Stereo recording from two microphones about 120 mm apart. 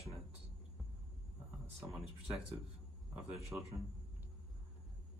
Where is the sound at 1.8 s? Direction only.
5° right (ahead or behind).